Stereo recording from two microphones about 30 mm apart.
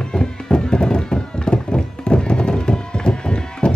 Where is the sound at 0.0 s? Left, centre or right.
Left.